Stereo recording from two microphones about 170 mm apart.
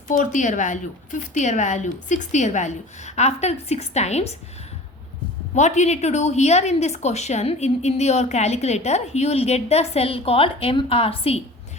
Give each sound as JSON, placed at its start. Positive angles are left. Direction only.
{"t": 0.1, "sound": "a woman's voice", "side_deg": 50}
{"t": 5.5, "sound": "a woman's voice", "side_deg": 45}